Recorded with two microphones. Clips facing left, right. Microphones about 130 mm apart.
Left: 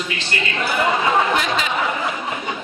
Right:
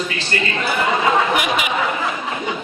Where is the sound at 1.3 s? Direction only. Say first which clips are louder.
Right 1 dB; 15° right (ahead or behind).